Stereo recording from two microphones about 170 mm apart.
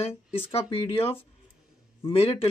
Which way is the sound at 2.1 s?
35° left (ahead or behind).